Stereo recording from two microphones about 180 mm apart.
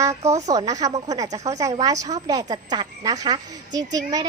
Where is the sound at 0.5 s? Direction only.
20° right (ahead or behind).